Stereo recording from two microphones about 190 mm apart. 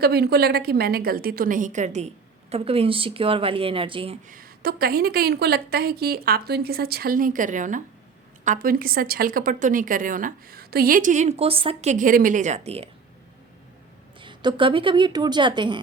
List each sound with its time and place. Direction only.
0.0 s a woman's voice: 55° right (ahead or behind); by 4.2 s 30° right (ahead or behind)
4.3 s a woman's voice: 50° right (ahead or behind); by 12.9 s 35° right (ahead or behind)
14.2 s speech: 25° right (ahead or behind)